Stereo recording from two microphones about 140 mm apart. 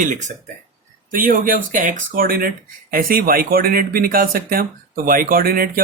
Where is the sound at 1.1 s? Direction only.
75° right (ahead or behind).